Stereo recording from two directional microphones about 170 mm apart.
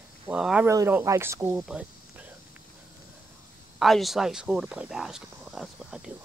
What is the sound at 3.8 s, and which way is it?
Speech, centre (ahead or behind).